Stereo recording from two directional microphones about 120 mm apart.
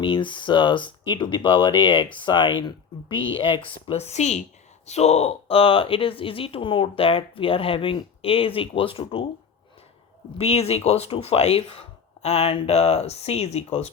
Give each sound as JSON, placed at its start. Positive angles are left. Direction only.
{"t": 0.0, "sound": "speech", "side_deg": 45}
{"t": 10.3, "sound": "speech", "side_deg": 55}